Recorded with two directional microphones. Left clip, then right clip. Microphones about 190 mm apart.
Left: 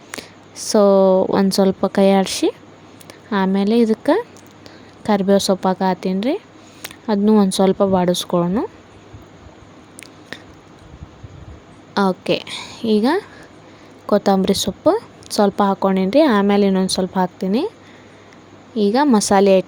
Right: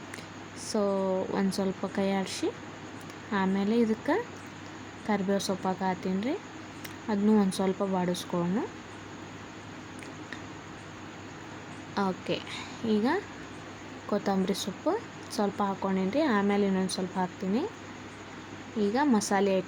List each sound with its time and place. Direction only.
0.7 s a woman's voice: 60° left (ahead or behind)
11.9 s a woman's voice: 65° left (ahead or behind)
18.8 s a woman's voice: 60° left (ahead or behind)